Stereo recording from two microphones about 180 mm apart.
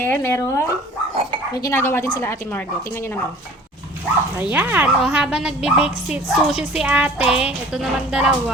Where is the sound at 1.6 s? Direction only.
15° left (ahead or behind).